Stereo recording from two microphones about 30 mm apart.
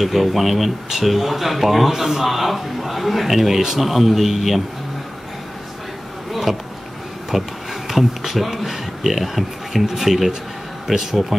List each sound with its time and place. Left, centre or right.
0.0 s a man's voice: centre
6.5 s a man's voice: centre